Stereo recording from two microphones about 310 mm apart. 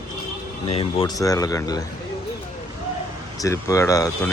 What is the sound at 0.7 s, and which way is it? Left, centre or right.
Speech, centre.